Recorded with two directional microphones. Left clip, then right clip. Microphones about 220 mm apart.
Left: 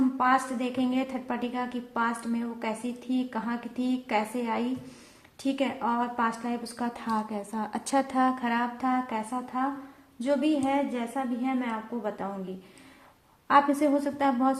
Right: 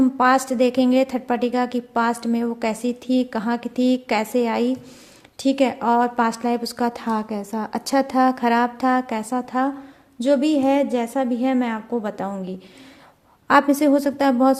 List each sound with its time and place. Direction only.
0.2 s a woman's voice: 45° right (ahead or behind)
13.5 s a woman's voice: 45° right (ahead or behind)